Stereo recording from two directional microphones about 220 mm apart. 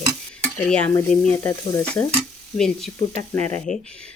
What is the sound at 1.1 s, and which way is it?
Stir, 5° left (ahead or behind).